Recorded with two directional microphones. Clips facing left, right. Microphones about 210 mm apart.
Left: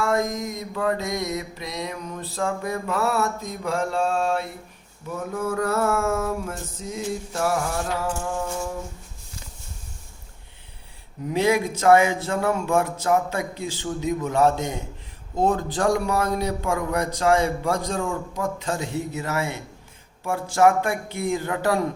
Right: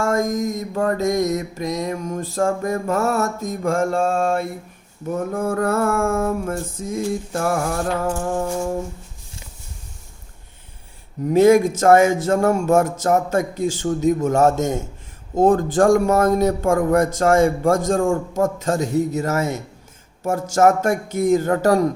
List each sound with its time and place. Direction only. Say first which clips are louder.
0.0 s mantra: right 4 dB; 45° right (ahead or behind)
11.3 s mantra: right 9 dB; 45° right (ahead or behind)